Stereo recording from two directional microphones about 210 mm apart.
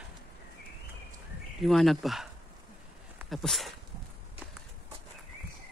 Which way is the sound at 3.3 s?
Centre (ahead or behind).